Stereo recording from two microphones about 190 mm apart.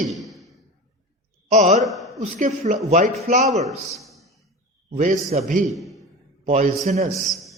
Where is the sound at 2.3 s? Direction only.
40° right (ahead or behind).